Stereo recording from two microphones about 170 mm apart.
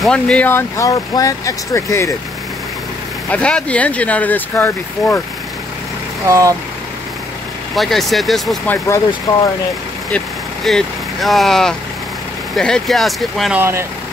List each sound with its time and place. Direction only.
0.0 s speech: 5° left (ahead or behind)
3.3 s speech: 5° left (ahead or behind)
6.2 s speech: 20° right (ahead or behind)
7.7 s speech: centre (ahead or behind)
9.3 s speech: 25° left (ahead or behind)
10.1 s speech: 5° left (ahead or behind)
13.6 s speech: 15° right (ahead or behind)